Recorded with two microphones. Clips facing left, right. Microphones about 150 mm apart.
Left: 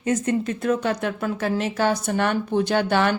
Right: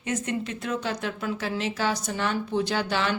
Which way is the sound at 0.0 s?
45° left (ahead or behind).